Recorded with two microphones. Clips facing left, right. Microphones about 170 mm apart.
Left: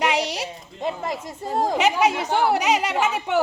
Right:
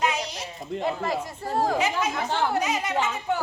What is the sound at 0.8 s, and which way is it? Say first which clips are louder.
Speech: even; 20° left (ahead or behind).